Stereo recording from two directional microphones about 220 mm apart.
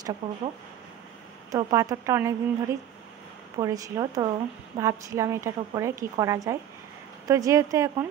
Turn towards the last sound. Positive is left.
turn(degrees=-15)  # may be behind; listen again after turning